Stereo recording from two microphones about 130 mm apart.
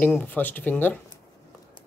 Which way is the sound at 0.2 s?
15° left (ahead or behind).